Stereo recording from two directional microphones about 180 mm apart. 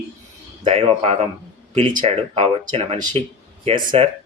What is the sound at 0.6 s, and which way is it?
Speech, 30° right (ahead or behind).